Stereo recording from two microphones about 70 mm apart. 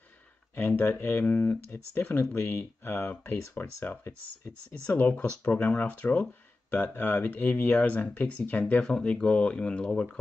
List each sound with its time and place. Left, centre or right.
0.6 s speech: left; by 10.1 s centre